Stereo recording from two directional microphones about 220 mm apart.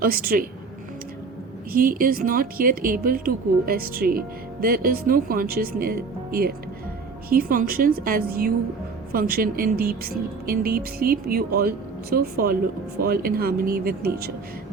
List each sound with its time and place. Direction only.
0.0 s speech: 40° right (ahead or behind)
1.7 s a woman's voice: 40° right (ahead or behind)